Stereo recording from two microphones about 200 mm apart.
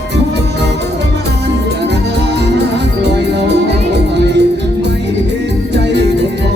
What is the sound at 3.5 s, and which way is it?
Music, 60° right (ahead or behind).